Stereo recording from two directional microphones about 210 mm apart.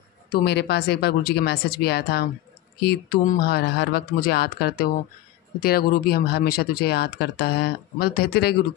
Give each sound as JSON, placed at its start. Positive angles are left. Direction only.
{"t": 0.3, "sound": "speech", "side_deg": 50}